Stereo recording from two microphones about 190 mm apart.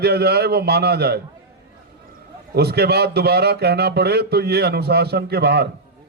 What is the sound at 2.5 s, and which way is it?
A man's voice, 60° right (ahead or behind).